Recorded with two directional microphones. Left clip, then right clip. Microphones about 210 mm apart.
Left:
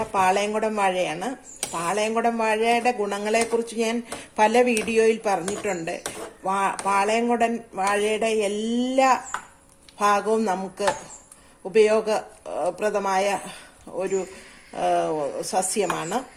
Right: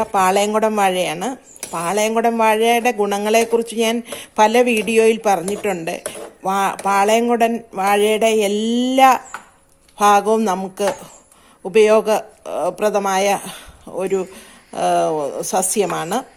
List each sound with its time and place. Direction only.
0.0 s speech: 35° right (ahead or behind)